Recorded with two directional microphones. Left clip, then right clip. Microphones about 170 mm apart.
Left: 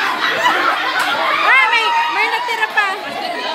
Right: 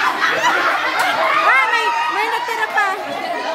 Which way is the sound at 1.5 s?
25° right (ahead or behind).